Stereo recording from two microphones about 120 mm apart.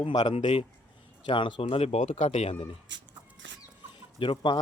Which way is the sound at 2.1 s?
75° left (ahead or behind).